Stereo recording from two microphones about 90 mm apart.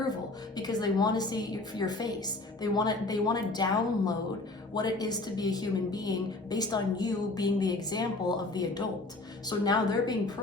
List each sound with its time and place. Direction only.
0.5 s a woman's voice: 50° left (ahead or behind)